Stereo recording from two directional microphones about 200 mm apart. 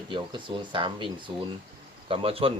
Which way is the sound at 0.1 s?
25° right (ahead or behind).